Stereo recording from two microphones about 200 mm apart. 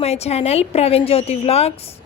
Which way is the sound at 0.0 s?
30° left (ahead or behind).